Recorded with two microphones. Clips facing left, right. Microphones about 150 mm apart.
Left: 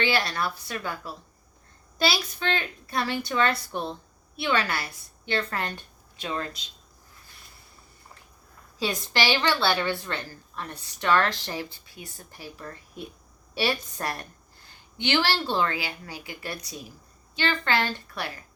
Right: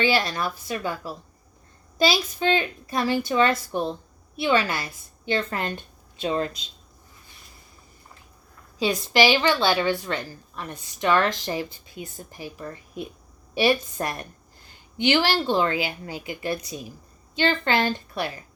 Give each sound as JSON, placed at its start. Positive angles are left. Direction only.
{"t": 0.0, "sound": "a woman's voice", "side_deg": -15}
{"t": 2.0, "sound": "a woman's voice", "side_deg": -15}
{"t": 9.1, "sound": "a woman's voice", "side_deg": -15}